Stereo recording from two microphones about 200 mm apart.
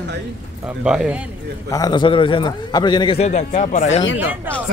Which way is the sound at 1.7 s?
20° left (ahead or behind).